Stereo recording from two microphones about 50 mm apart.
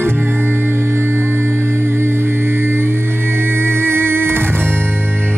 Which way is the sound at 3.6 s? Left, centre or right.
Right.